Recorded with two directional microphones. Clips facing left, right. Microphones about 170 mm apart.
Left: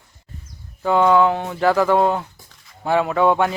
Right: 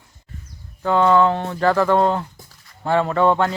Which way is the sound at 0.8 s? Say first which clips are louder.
Even; 10° left (ahead or behind).